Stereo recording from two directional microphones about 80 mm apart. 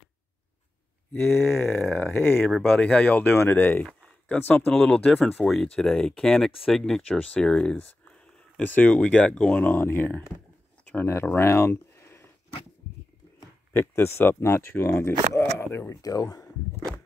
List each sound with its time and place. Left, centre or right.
1.1 s speech: left
9.7 s speech: left
11.3 s a sound: left
13.7 s speech: left
16.0 s speech: left